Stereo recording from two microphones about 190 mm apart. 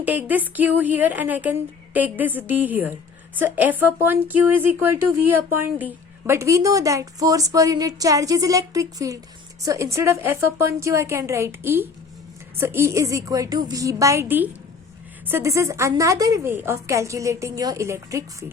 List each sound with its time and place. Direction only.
0.0 s speech: 10° right (ahead or behind)